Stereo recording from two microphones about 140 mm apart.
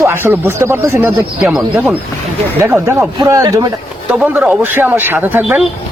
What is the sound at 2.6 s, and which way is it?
Speech, 20° right (ahead or behind).